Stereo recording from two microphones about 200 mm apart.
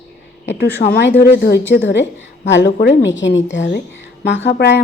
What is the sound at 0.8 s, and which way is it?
A woman's voice, 55° left (ahead or behind).